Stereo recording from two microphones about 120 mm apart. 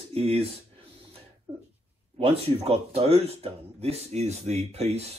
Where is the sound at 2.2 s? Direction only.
55° right (ahead or behind).